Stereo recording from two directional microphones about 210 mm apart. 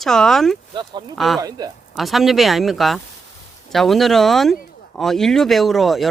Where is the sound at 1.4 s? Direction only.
15° right (ahead or behind).